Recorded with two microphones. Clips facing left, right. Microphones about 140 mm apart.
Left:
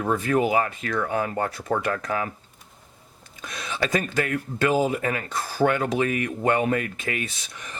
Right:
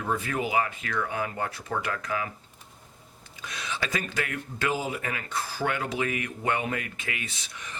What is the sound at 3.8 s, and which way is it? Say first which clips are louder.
Speech: left 8 dB; 45° left (ahead or behind).